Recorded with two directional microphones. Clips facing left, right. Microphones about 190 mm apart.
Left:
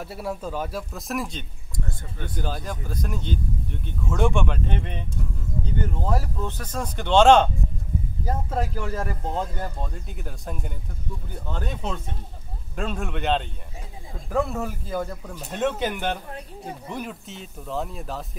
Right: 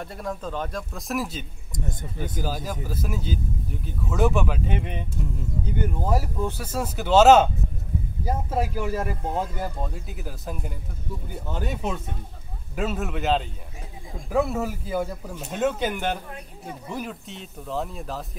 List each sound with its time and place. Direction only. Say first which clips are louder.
0.0 s speech: left 1 dB; 5° left (ahead or behind)
1.7 s speech: right 1 dB; 20° right (ahead or behind)
2.3 s speech: even; 5° right (ahead or behind)